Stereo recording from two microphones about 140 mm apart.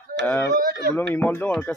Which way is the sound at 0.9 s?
15° left (ahead or behind).